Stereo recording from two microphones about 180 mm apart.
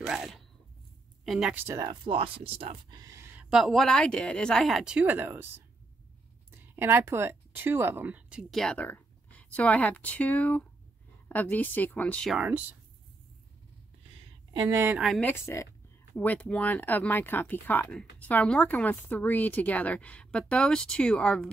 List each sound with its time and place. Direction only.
0.0 s speech: centre (ahead or behind)
1.8 s speech: 25° right (ahead or behind); by 5.5 s 10° right (ahead or behind)
6.5 s a woman's voice: 10° right (ahead or behind); by 12.4 s 5° left (ahead or behind)
12.4 s speech: 10° right (ahead or behind)
14.5 s speech: 25° right (ahead or behind)
14.8 s speech: 5° right (ahead or behind)
15.2 s a woman's voice: 15° left (ahead or behind)